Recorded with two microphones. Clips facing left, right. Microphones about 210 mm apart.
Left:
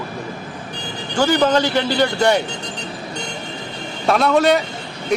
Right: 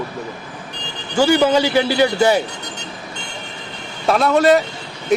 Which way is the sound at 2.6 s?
30° left (ahead or behind).